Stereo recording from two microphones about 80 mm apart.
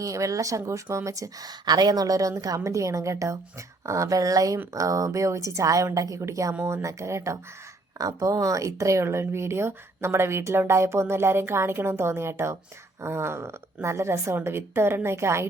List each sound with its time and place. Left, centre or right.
0.0 s speech: right